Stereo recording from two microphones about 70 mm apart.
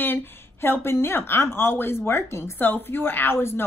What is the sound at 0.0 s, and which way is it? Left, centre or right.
Speech, left.